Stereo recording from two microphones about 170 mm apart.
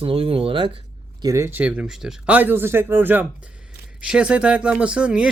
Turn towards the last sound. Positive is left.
turn(degrees=-5)  # may be behind; listen again after turning